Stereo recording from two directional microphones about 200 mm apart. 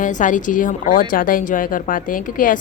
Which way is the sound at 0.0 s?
40° left (ahead or behind).